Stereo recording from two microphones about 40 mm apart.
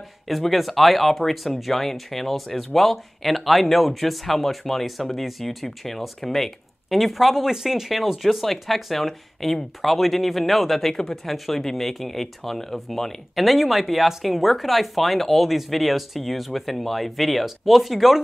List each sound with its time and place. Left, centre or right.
0.5 s speech: centre